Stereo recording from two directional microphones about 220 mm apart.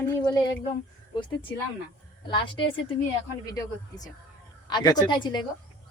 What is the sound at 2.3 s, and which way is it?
Speech, 20° left (ahead or behind).